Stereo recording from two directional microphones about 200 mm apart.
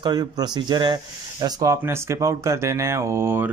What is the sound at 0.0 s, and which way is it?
Speech, 20° right (ahead or behind).